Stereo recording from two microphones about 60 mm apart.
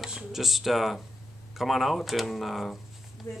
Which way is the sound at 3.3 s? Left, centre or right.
Left.